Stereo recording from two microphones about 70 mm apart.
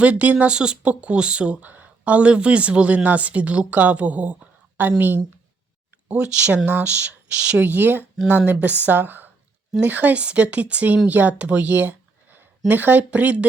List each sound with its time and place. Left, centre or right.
0.0 s speech: centre
6.1 s speech: centre
7.6 s speech: right